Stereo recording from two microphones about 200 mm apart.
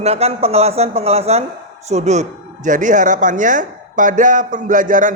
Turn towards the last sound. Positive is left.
turn(degrees=-40)  # may be behind; listen again after turning